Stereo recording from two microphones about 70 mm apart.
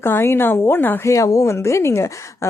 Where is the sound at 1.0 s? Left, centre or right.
Left.